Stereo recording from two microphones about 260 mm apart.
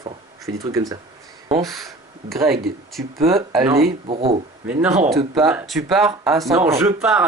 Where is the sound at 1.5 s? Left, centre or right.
Centre.